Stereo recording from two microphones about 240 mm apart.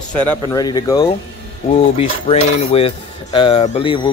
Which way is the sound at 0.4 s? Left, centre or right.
Centre.